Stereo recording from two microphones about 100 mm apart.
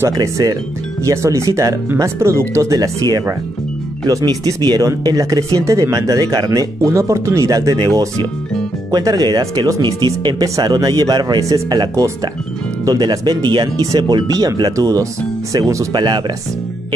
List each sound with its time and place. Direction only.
0.1 s speech: 35° right (ahead or behind)
8.9 s speech: 40° right (ahead or behind)
15.9 s speech: 50° right (ahead or behind)